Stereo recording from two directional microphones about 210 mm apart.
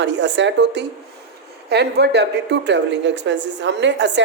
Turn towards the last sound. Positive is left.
turn(degrees=-55)  # may be behind; listen again after turning